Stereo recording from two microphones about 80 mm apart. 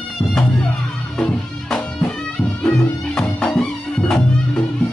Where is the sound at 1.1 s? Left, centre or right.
Centre.